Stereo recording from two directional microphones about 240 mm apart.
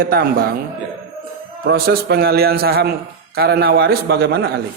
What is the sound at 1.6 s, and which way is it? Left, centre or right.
Speech, right.